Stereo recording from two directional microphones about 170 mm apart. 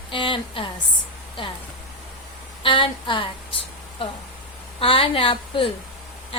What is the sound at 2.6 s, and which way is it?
Speech, 30° left (ahead or behind).